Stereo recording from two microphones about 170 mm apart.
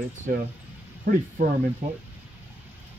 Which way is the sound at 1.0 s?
50° right (ahead or behind).